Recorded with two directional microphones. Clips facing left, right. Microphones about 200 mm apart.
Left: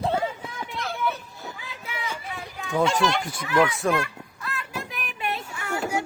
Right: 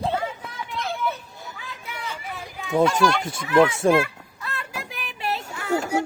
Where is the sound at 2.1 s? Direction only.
10° right (ahead or behind).